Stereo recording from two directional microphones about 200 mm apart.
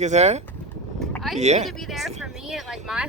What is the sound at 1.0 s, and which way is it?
Boat, centre (ahead or behind).